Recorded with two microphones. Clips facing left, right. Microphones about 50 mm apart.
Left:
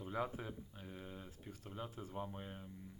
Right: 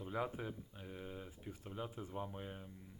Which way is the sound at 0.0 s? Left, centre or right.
Centre.